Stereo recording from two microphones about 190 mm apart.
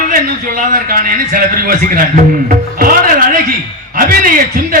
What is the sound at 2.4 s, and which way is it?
Music, 45° right (ahead or behind).